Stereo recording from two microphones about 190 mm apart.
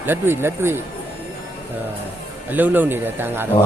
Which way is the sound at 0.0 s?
10° right (ahead or behind).